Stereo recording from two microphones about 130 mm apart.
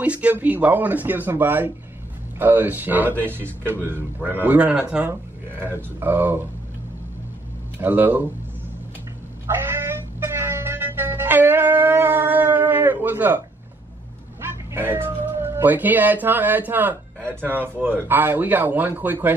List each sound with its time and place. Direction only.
0.0 s a man's voice: 10° right (ahead or behind)
7.8 s a man's voice: 15° right (ahead or behind)
9.5 s music: 15° right (ahead or behind)
14.4 s a man's voice: 15° right (ahead or behind)